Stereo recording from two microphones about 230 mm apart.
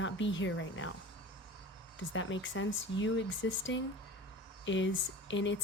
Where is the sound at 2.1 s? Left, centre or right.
Left.